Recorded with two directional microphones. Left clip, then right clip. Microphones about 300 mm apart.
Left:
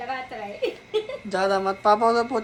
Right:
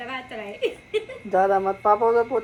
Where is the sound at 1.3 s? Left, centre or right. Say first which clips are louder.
Right 4 dB; centre.